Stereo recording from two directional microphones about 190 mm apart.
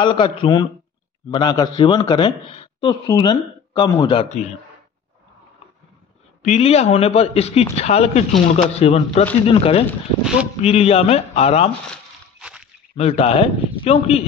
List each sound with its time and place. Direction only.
0.0 s speech: 25° left (ahead or behind)
6.4 s speech: 35° left (ahead or behind)
12.4 s a sound: 5° right (ahead or behind)
12.9 s speech: 30° left (ahead or behind)